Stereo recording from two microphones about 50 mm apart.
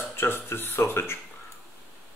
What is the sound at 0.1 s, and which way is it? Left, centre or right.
Speech, left.